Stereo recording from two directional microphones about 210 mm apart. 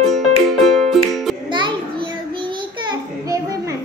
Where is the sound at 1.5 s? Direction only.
20° right (ahead or behind).